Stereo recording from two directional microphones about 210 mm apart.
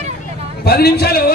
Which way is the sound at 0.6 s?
50° left (ahead or behind).